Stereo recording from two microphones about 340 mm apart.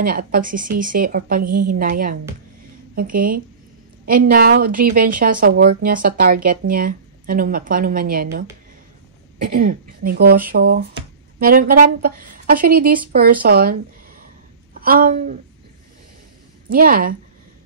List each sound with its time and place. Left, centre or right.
0.0 s a woman's voice: right
14.8 s a woman's voice: right
16.7 s a woman's voice: right